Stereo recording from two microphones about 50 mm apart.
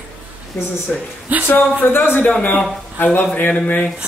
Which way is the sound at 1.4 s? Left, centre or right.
Left.